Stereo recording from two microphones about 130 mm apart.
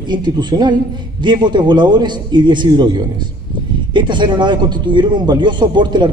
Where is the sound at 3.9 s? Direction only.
35° right (ahead or behind).